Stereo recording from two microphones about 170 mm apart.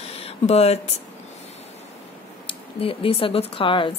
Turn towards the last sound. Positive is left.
turn(degrees=30)  # may be behind; listen again after turning